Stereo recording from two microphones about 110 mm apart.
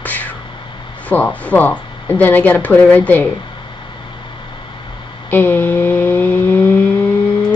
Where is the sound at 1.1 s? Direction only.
15° left (ahead or behind).